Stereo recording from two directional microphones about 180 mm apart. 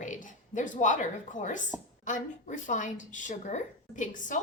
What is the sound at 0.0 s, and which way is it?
A woman's voice, 45° left (ahead or behind).